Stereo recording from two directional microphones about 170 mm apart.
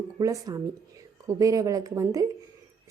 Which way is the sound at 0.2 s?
20° right (ahead or behind).